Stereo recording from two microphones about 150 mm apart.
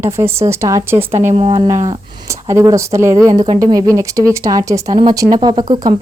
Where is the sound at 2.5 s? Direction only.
20° right (ahead or behind).